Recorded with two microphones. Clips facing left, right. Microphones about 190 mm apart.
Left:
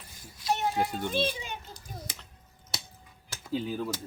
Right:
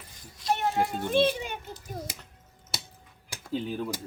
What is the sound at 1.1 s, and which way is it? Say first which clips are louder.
Speech: right 6 dB; 60° right (ahead or behind).